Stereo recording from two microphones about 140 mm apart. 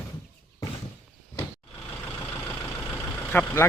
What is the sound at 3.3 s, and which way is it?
Speech, 15° left (ahead or behind).